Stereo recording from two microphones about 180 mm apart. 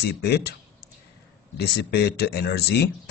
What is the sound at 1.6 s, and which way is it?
Speech, 65° left (ahead or behind).